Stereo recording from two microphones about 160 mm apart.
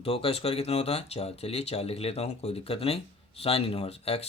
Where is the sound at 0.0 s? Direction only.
35° left (ahead or behind).